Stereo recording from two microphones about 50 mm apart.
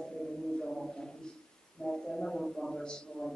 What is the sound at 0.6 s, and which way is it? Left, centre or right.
A woman's voice, centre.